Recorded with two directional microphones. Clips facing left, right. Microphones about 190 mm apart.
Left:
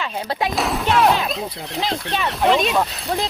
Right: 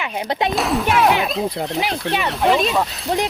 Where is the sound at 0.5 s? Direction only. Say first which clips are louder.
Even; centre (ahead or behind).